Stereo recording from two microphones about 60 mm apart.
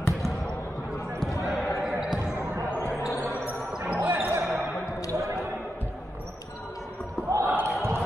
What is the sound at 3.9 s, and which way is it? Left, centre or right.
Basketball bounce, right.